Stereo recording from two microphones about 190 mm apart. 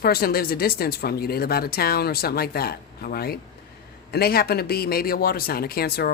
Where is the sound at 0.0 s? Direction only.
55° left (ahead or behind).